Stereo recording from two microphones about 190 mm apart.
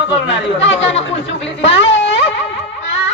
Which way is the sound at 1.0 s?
70° left (ahead or behind).